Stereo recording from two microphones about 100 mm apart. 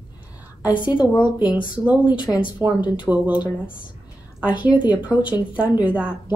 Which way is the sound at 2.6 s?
20° right (ahead or behind).